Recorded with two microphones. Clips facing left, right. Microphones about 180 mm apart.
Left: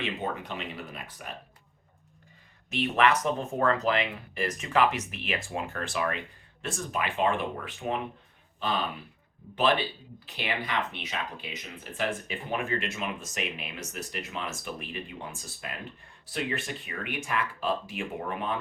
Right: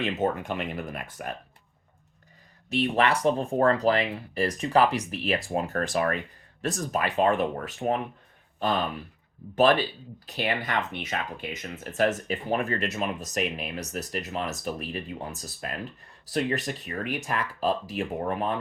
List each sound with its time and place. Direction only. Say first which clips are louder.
0.0 s speech: right 6 dB; 45° right (ahead or behind)
2.6 s speech: right 1 dB; 35° right (ahead or behind)
9.6 s speech: right 5 dB; 45° right (ahead or behind)